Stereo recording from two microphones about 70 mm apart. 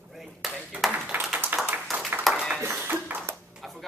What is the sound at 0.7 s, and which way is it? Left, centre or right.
Speech, right.